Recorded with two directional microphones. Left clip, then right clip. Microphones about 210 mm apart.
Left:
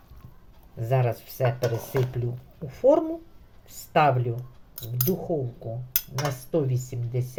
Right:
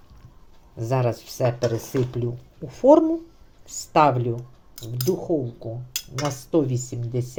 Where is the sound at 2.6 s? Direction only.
25° right (ahead or behind).